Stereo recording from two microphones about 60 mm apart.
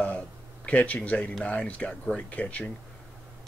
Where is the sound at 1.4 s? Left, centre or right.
Centre.